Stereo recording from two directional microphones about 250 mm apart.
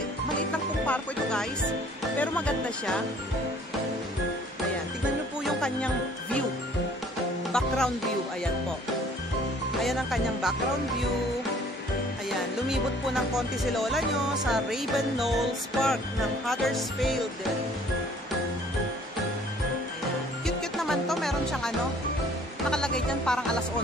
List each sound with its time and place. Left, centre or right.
0.8 s music: centre
5.4 s music: centre
7.5 s music: centre
9.8 s music: centre
13.7 s music: centre
20.4 s music: centre